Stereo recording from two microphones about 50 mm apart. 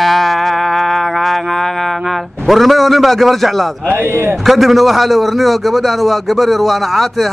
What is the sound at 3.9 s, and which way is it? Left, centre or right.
Speech, right.